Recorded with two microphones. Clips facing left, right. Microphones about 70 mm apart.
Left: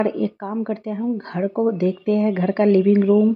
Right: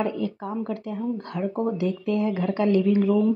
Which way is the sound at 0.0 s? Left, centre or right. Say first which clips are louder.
Left 5 dB; left.